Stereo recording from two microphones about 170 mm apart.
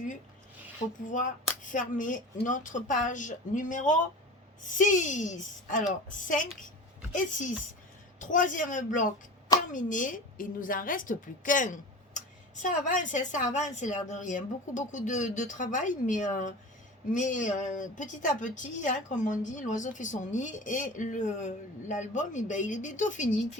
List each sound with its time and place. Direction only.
1.0 s a woman's voice: 50° left (ahead or behind)